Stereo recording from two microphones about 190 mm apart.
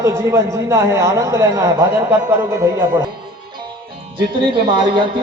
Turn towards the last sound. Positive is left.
turn(degrees=-25)  # may be behind; listen again after turning